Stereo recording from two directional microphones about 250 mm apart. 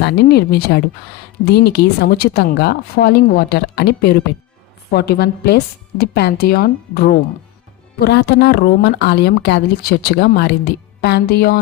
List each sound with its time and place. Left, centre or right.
0.0 s a woman's voice: left